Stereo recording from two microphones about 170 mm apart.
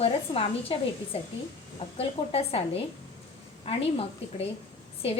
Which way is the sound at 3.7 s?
35° left (ahead or behind).